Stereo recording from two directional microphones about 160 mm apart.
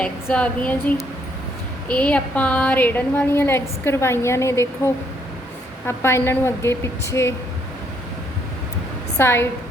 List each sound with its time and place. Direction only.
0.0 s a woman's voice: 10° left (ahead or behind)
5.8 s a woman's voice: 15° left (ahead or behind)
9.1 s a woman's voice: 15° left (ahead or behind)